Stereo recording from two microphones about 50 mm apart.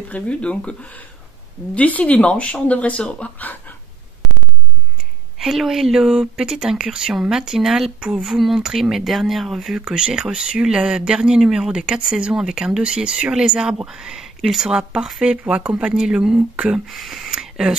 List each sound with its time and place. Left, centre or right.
0.1 s speech: left
5.4 s speech: centre
9.8 s speech: centre
15.4 s speech: right
16.9 s speech: centre
17.3 s a sound: centre